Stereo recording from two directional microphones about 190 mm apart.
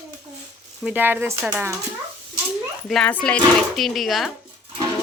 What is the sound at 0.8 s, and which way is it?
Speech, 10° right (ahead or behind).